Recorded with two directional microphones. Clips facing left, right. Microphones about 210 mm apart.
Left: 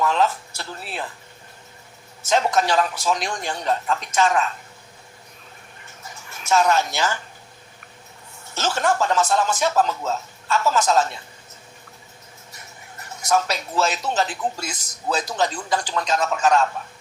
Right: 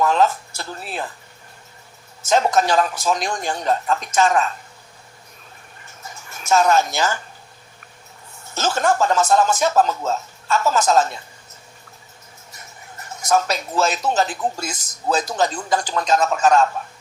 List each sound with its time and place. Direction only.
0.0 s speech: 45° right (ahead or behind)
2.2 s speech: 45° right (ahead or behind)
6.3 s speech: 45° right (ahead or behind)
8.5 s speech: 45° right (ahead or behind)
13.2 s speech: 45° right (ahead or behind)